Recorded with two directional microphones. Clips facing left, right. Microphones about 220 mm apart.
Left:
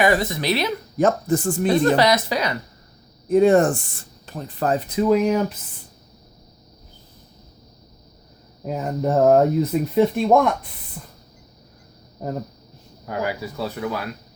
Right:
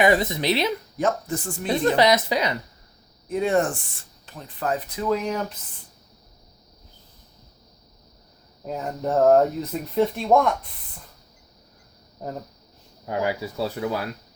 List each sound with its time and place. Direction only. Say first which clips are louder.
0.0 s speech: even; 20° right (ahead or behind)
0.9 s speech: left 9 dB; 45° left (ahead or behind)
1.6 s speech: left 1 dB; 20° right (ahead or behind)
3.2 s speech: left 7 dB; 45° left (ahead or behind)
4.9 s speech: left 9 dB; 15° left (ahead or behind)
8.6 s speech: left 4 dB; 5° left (ahead or behind)
13.1 s speech: right 1 dB; 25° right (ahead or behind)